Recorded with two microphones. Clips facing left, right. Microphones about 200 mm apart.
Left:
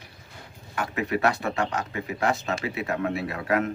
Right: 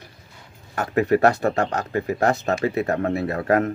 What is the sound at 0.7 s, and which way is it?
Speech, 40° right (ahead or behind).